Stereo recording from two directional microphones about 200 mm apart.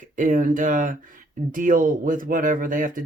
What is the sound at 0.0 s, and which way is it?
Speech, 40° right (ahead or behind).